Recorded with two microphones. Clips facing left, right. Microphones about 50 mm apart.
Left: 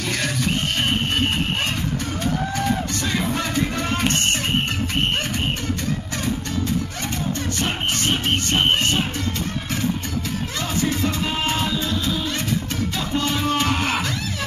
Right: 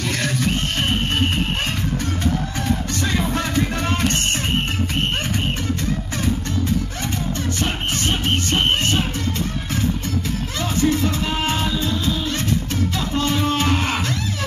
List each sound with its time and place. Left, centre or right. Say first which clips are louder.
0.0 s music: right 2 dB; centre
3.4 s music: right 1 dB; centre
10.6 s music: right 4 dB; centre
13.1 s music: right 1 dB; centre